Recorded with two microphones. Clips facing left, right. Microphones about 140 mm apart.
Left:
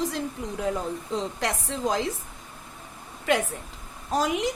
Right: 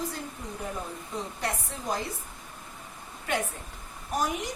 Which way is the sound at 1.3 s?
90° left.